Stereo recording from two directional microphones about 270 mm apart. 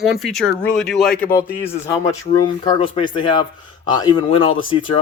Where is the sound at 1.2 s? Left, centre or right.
Left.